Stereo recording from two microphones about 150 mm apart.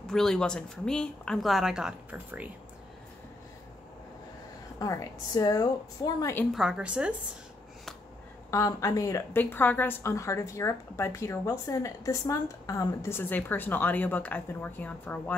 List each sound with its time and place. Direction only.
0.0 s speech: 5° left (ahead or behind)
4.7 s a woman's voice: 20° left (ahead or behind)
6.5 s a woman's voice: 5° right (ahead or behind)
8.5 s a woman's voice: 20° left (ahead or behind)